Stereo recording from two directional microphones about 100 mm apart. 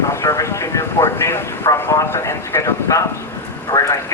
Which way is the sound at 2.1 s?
25° left (ahead or behind).